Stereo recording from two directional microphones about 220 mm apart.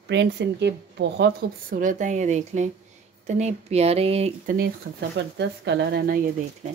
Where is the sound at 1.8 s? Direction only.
35° right (ahead or behind).